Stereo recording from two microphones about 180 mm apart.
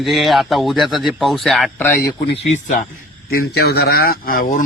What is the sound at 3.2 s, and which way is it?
Speech, 60° left (ahead or behind).